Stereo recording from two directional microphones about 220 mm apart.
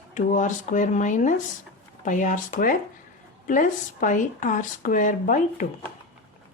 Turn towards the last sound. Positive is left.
turn(degrees=35)  # may be behind; listen again after turning